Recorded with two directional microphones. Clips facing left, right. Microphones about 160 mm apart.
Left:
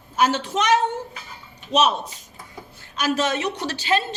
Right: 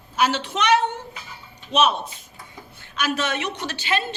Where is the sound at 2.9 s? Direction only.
35° left (ahead or behind).